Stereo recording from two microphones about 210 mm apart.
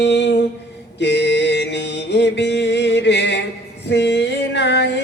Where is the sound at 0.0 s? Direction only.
55° left (ahead or behind).